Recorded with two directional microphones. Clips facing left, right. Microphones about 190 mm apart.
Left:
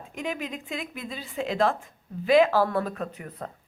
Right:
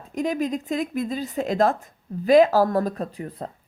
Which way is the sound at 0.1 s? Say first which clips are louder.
Right 8 dB; 40° right (ahead or behind).